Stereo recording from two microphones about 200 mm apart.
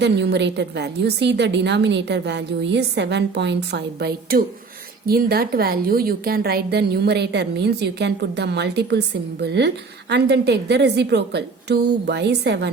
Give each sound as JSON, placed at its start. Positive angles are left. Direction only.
{"t": 0.0, "sound": "a woman's voice", "side_deg": -60}